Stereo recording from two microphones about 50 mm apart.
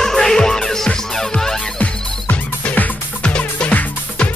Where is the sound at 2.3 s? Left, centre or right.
Left.